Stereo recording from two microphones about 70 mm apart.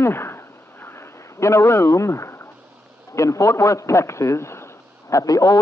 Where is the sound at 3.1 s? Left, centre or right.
Left.